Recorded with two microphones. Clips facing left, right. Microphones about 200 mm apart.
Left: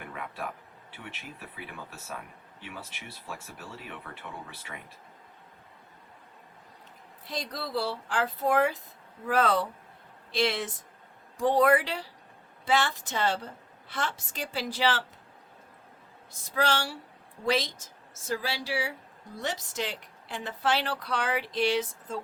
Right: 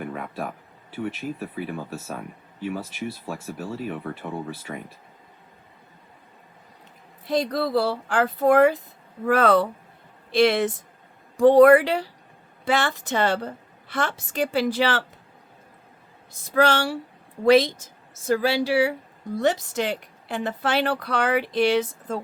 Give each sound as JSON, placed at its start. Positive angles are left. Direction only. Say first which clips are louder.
{"t": 0.0, "sound": "speech", "louder": "right 7 dB", "side_deg": -40}
{"t": 7.3, "sound": "a woman's voice", "louder": "right 12 dB", "side_deg": -60}
{"t": 16.6, "sound": "a woman's voice", "louder": "right 8 dB", "side_deg": -60}